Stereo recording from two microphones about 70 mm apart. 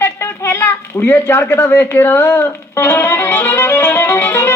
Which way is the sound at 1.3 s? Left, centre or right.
Left.